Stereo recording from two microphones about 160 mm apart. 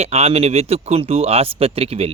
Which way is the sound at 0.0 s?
40° right (ahead or behind).